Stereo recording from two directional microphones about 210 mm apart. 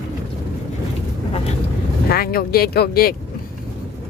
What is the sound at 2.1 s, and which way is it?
Speech, 45° left (ahead or behind).